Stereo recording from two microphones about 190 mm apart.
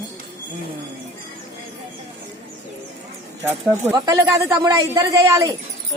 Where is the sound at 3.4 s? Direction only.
15° right (ahead or behind).